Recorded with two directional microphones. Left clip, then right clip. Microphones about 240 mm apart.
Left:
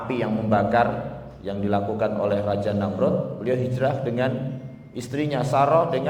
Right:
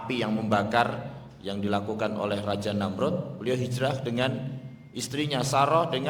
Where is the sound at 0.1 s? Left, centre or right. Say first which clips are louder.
Left 4 dB; right.